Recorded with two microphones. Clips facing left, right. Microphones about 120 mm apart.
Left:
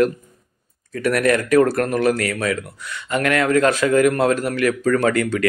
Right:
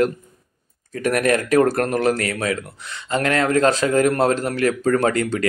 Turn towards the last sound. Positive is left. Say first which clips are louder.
# left 1 dB
turn(degrees=-30)  # may be behind; listen again after turning